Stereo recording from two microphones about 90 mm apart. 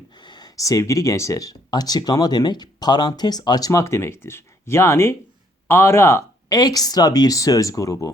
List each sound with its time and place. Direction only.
0.2 s speech: 55° left (ahead or behind); by 6.2 s 30° left (ahead or behind)
6.5 s speech: 45° left (ahead or behind)